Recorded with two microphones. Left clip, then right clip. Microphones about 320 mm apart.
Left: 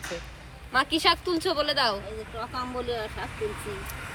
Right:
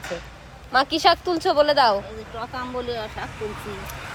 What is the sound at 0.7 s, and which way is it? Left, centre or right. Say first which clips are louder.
Speech: right 5 dB; right.